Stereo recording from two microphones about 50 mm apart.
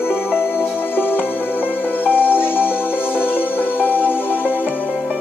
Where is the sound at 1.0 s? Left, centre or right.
Left.